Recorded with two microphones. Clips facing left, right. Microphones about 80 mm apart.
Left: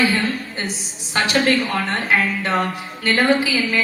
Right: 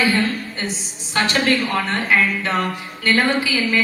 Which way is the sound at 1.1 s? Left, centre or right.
Left.